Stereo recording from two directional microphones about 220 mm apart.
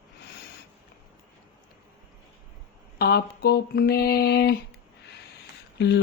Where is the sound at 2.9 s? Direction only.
45° left (ahead or behind).